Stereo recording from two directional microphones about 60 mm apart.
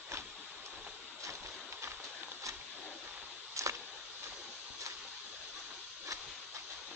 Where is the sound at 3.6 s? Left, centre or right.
Right.